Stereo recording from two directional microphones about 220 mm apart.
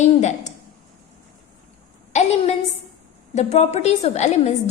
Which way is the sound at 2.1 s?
30° left (ahead or behind).